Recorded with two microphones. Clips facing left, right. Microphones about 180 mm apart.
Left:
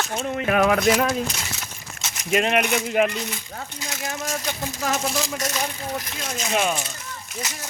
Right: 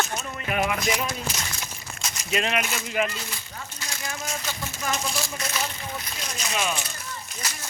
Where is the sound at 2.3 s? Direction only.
50° left (ahead or behind).